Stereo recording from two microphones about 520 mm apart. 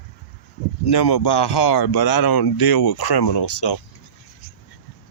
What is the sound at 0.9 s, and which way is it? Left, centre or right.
Speech, left.